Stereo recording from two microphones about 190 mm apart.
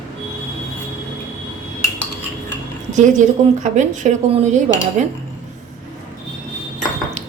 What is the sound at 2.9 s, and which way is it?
A woman's voice, 40° right (ahead or behind).